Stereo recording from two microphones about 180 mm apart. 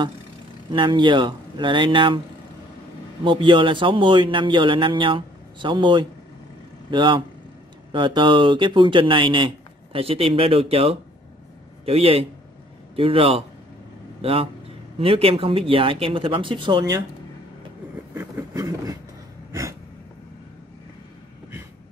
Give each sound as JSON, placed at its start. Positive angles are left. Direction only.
{"t": 0.7, "sound": "a man's voice", "side_deg": -25}
{"t": 3.3, "sound": "a man's voice", "side_deg": -25}
{"t": 18.1, "sound": "vehicle", "side_deg": -15}